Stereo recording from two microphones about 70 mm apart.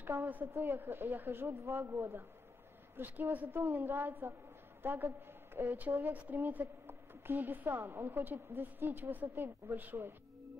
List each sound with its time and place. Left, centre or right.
0.0 s a woman's voice: right
3.0 s a woman's voice: right